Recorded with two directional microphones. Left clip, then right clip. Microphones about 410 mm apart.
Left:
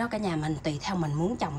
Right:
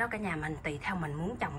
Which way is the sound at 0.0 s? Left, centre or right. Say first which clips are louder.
Left 3 dB; centre.